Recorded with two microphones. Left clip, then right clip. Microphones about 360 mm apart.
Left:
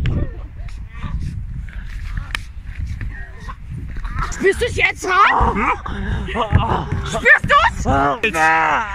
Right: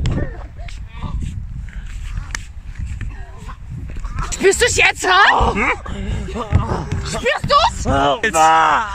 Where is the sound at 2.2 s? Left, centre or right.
Centre.